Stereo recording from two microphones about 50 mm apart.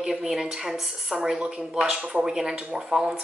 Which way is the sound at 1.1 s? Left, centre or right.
Right.